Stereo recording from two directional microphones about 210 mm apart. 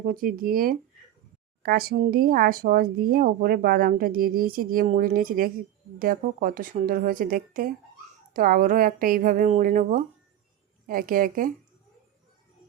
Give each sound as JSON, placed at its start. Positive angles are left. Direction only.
{"t": 0.0, "sound": "a woman's voice", "side_deg": -40}